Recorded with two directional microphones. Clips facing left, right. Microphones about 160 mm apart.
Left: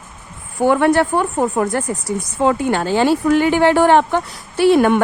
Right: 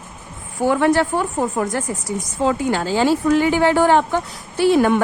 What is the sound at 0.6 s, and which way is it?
A woman's voice, 60° left (ahead or behind).